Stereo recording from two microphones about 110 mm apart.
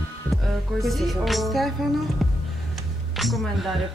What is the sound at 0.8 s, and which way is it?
Speech, centre (ahead or behind).